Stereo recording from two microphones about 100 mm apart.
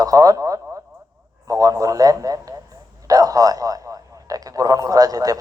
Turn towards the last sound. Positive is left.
turn(degrees=-40)  # may be behind; listen again after turning